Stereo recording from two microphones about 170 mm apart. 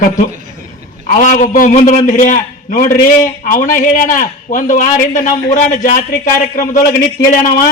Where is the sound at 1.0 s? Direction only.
50° left (ahead or behind).